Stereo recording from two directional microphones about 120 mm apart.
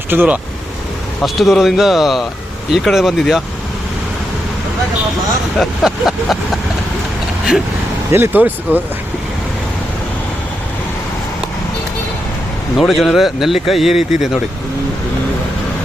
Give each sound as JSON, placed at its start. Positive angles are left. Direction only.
{"t": 0.1, "sound": "speech", "side_deg": -15}
{"t": 1.2, "sound": "speech", "side_deg": 0}
{"t": 5.5, "sound": "speech", "side_deg": 0}
{"t": 8.1, "sound": "speech", "side_deg": -20}
{"t": 12.7, "sound": "speech", "side_deg": 0}